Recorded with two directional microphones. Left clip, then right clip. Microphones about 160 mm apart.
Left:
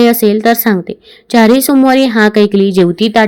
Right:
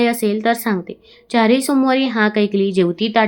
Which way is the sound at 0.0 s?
40° left (ahead or behind).